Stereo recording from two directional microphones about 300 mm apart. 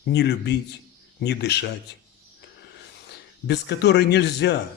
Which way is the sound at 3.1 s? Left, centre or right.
Left.